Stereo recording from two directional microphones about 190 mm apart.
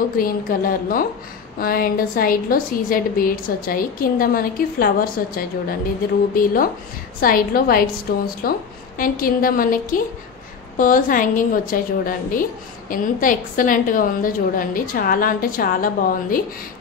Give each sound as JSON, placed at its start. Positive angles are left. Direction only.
{"t": 0.2, "sound": "a woman's voice", "side_deg": 50}